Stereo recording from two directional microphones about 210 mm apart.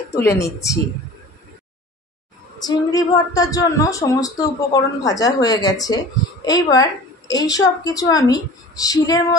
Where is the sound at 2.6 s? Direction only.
15° left (ahead or behind).